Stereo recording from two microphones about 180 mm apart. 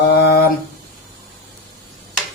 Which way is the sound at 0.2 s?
65° left (ahead or behind).